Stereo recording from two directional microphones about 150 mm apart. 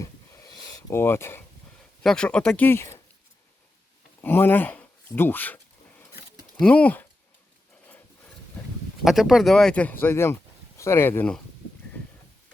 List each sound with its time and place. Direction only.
0.0 s a sound: 20° left (ahead or behind)
2.0 s speech: 5° left (ahead or behind)
2.6 s speech: 15° left (ahead or behind)
4.2 s speech: 15° left (ahead or behind)
6.6 s speech: 10° left (ahead or behind)
9.0 s speech: centre (ahead or behind)